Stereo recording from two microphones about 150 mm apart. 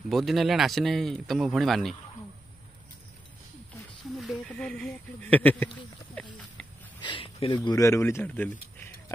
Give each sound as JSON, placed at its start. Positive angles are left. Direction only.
{"t": 0.1, "sound": "speech", "side_deg": 0}
{"t": 4.2, "sound": "speech", "side_deg": 5}
{"t": 7.0, "sound": "speech", "side_deg": 35}